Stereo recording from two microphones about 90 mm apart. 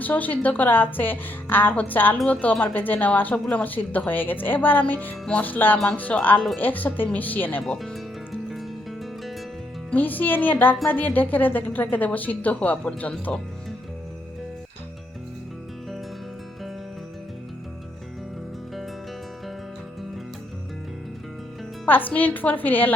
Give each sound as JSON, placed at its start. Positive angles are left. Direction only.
{"t": 0.0, "sound": "a woman's voice", "side_deg": 20}
{"t": 7.8, "sound": "music", "side_deg": 0}
{"t": 9.9, "sound": "a woman's voice", "side_deg": 20}
{"t": 21.8, "sound": "a woman's voice", "side_deg": 20}